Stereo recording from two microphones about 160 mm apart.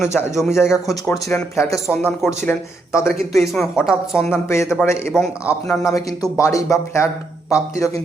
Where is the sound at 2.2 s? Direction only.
Centre (ahead or behind).